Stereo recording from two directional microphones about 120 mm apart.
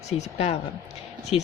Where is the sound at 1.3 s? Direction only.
50° left (ahead or behind).